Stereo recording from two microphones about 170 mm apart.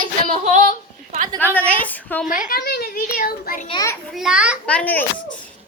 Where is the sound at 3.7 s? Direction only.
20° left (ahead or behind).